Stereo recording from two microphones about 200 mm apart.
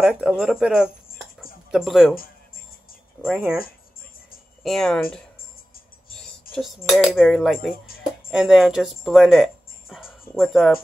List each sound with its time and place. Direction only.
0.0 s speech: 5° right (ahead or behind)
2.1 s music: 45° left (ahead or behind)
3.2 s speech: 5° right (ahead or behind)
4.6 s speech: centre (ahead or behind)
6.5 s cutlery: 45° left (ahead or behind)
6.9 s speech: centre (ahead or behind)
7.8 s music: 45° left (ahead or behind)
8.3 s speech: 5° right (ahead or behind)